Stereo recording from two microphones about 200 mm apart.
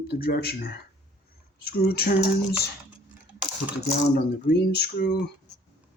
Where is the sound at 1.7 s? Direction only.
50° left (ahead or behind).